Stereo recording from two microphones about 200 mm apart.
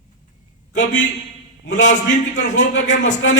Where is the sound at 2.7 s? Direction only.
65° left (ahead or behind).